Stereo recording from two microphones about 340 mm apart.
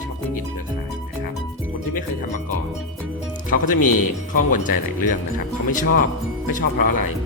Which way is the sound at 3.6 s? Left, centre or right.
Left.